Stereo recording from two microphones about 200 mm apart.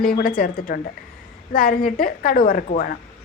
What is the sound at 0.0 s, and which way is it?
A woman's voice, 45° left (ahead or behind).